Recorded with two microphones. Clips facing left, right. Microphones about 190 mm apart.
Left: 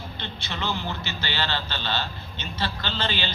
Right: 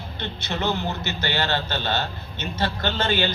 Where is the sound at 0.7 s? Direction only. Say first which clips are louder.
Right 4 dB; 45° right (ahead or behind).